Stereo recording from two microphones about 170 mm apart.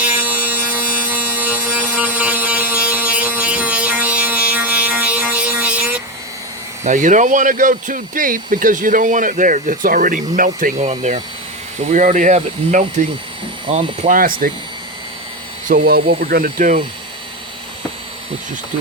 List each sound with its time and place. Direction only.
0.0 s tools: 10° right (ahead or behind)
0.8 s a sound: 10° right (ahead or behind)
6.8 s speech: 45° right (ahead or behind)
15.7 s speech: 65° right (ahead or behind)